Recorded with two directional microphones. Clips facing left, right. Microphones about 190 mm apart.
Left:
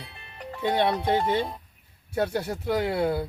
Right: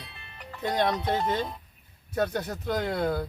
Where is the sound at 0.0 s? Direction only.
30° left (ahead or behind).